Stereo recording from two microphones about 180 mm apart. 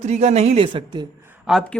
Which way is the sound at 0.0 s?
40° right (ahead or behind).